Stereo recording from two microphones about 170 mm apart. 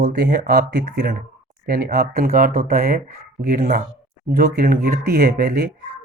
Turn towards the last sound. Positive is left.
turn(degrees=-70)  # may be behind; listen again after turning